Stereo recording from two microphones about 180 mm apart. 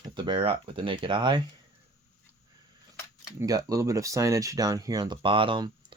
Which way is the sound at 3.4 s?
20° right (ahead or behind).